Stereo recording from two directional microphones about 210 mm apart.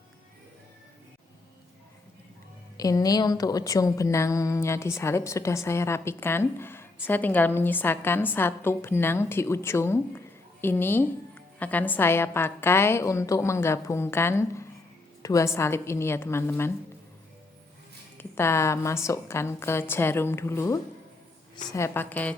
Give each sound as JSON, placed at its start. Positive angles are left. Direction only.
{"t": 2.7, "sound": "a woman's voice", "side_deg": 15}
{"t": 15.2, "sound": "a sound", "side_deg": 15}
{"t": 15.5, "sound": "a woman's voice", "side_deg": 15}
{"t": 18.2, "sound": "a woman's voice", "side_deg": 10}